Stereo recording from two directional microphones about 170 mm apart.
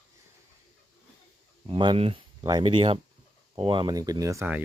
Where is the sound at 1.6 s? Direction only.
30° right (ahead or behind).